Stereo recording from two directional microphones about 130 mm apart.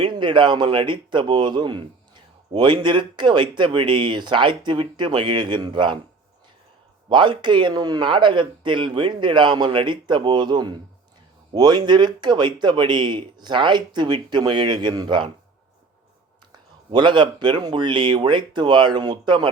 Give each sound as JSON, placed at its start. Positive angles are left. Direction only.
{"t": 0.0, "sound": "speech", "side_deg": -40}
{"t": 7.1, "sound": "speech", "side_deg": -35}
{"t": 16.5, "sound": "speech", "side_deg": -35}